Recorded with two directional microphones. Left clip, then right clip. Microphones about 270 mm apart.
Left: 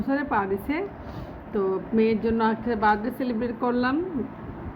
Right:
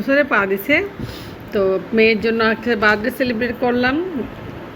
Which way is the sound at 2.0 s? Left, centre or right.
Centre.